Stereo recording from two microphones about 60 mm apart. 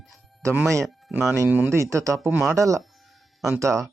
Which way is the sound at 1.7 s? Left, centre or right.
Right.